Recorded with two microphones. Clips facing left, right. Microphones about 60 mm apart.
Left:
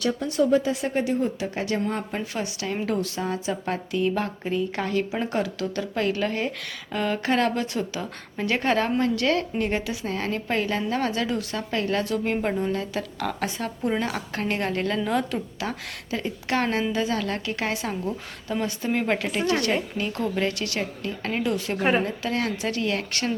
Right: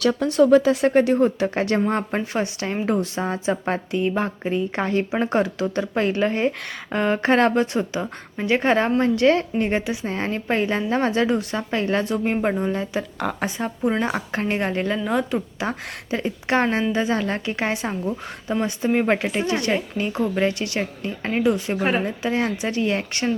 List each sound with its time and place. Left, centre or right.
0.0 s a woman's voice: right
8.4 s a woman's voice: centre
21.8 s a woman's voice: centre
22.0 s a woman's voice: centre